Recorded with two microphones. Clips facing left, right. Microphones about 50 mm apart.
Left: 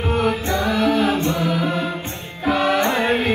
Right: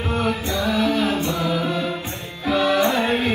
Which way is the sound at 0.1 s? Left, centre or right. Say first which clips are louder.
Left 3 dB; left.